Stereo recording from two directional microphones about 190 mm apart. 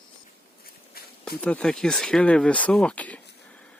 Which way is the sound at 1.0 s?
55° left (ahead or behind).